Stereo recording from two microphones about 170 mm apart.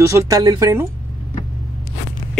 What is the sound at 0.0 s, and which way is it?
Speech, 15° right (ahead or behind).